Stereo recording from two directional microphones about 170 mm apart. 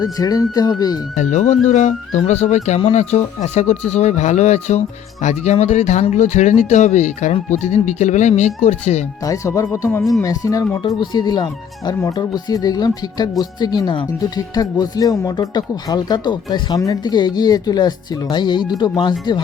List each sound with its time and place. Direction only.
0.0 s speech: 20° left (ahead or behind)
1.1 s speech: 45° left (ahead or behind)
9.2 s speech: 20° left (ahead or behind)